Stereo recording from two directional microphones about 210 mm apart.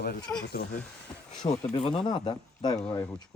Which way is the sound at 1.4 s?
30° left (ahead or behind).